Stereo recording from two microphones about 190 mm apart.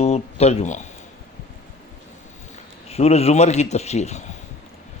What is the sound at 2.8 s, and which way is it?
Speech, 35° left (ahead or behind).